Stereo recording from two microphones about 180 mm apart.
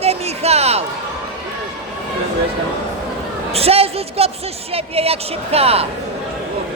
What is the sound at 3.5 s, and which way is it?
A man's voice, 35° right (ahead or behind).